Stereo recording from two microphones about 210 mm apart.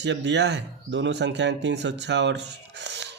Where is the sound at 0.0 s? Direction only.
55° right (ahead or behind).